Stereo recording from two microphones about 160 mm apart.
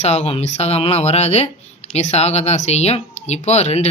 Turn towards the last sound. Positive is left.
turn(degrees=45)  # may be behind; listen again after turning